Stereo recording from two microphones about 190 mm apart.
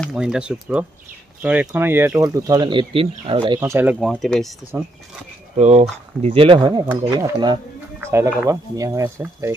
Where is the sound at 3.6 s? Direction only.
10° right (ahead or behind).